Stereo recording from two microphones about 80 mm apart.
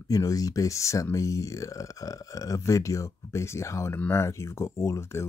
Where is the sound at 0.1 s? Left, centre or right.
Left.